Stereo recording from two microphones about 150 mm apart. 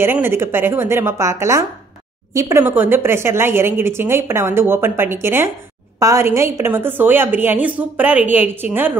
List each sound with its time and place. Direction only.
0.0 s a woman's voice: 15° right (ahead or behind)